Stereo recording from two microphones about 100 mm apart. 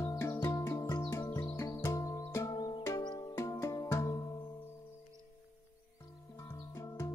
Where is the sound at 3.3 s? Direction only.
30° left (ahead or behind).